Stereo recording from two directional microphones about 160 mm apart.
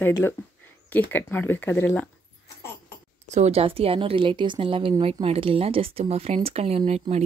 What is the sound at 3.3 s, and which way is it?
A woman's voice, 45° right (ahead or behind).